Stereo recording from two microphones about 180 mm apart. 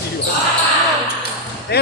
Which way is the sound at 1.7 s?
65° left (ahead or behind).